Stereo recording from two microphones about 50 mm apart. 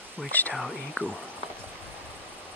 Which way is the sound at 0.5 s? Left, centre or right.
Centre.